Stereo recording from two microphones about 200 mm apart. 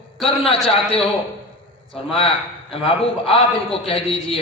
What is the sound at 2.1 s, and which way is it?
A man's voice, 25° left (ahead or behind).